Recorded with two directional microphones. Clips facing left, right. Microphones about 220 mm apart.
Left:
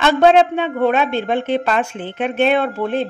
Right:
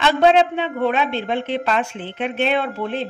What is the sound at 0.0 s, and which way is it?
A woman's voice, 50° left (ahead or behind).